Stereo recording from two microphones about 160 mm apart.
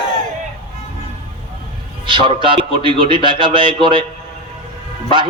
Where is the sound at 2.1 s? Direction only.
30° right (ahead or behind).